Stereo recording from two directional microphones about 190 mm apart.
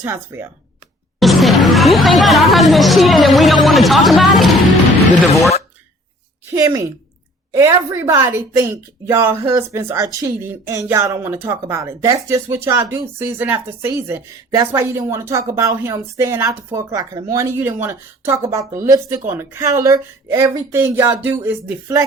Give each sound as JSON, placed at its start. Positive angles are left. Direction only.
{"t": 0.0, "sound": "a woman's voice", "side_deg": -10}
{"t": 1.2, "sound": "chatter", "side_deg": 0}
{"t": 6.4, "sound": "a woman's voice", "side_deg": -15}